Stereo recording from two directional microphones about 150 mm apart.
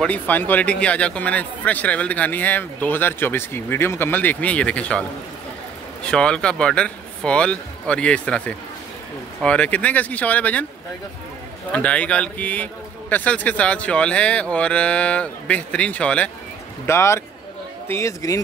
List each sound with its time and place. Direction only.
0.0 s speech: 10° left (ahead or behind)
6.0 s speech: 5° left (ahead or behind)
11.7 s speech: 10° left (ahead or behind)
16.8 s speech: 20° left (ahead or behind)